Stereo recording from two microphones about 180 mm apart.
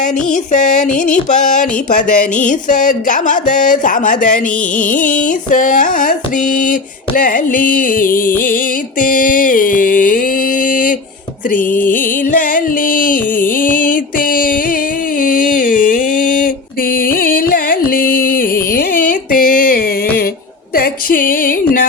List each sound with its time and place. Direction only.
0.5 s music: 45° left (ahead or behind)
11.5 s music: 10° left (ahead or behind)
11.9 s music: 50° left (ahead or behind)
15.2 s a sound: 50° left (ahead or behind)
20.7 s music: 55° left (ahead or behind)